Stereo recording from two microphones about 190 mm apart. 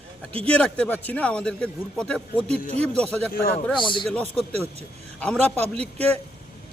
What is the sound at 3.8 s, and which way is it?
Speech, 25° left (ahead or behind).